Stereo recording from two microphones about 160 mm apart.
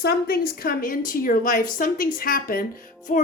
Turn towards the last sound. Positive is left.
turn(degrees=55)  # may be behind; listen again after turning